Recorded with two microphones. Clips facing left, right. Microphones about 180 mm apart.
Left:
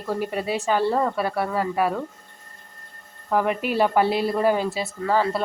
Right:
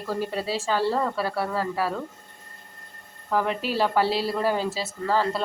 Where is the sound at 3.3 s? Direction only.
10° left (ahead or behind).